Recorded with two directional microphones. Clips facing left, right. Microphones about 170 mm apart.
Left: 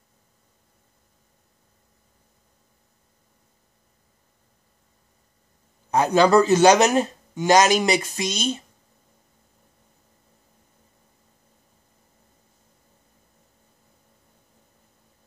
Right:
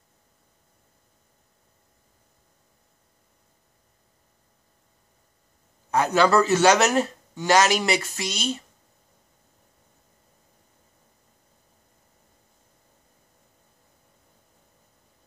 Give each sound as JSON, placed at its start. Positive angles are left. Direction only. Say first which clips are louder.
{"t": 5.9, "sound": "speech", "louder": "left 3 dB", "side_deg": 20}